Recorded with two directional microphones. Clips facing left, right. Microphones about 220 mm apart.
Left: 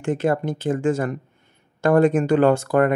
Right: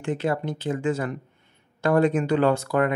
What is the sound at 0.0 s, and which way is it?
Speech, 50° left (ahead or behind).